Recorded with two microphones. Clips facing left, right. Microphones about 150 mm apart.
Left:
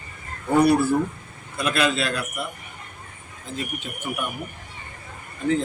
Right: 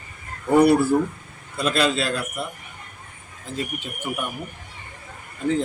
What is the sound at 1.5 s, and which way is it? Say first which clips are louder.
Speech: right 1 dB; 30° right (ahead or behind).